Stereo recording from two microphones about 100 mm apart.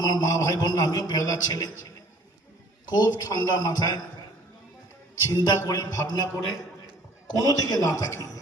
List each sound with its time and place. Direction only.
0.0 s a man's voice: 35° left (ahead or behind)
2.9 s a man's voice: 40° left (ahead or behind)
5.2 s a man's voice: 40° left (ahead or behind)
7.4 s a man's voice: 35° left (ahead or behind)